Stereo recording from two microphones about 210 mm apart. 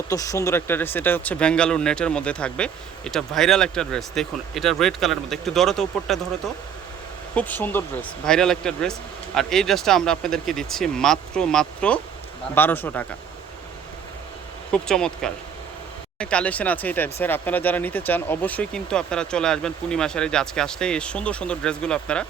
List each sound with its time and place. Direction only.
0.1 s speech: 15° left (ahead or behind)
7.3 s a man's voice: 10° left (ahead or behind)
14.7 s speech: 5° left (ahead or behind)